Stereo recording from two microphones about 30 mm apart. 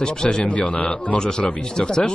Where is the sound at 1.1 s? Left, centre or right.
Left.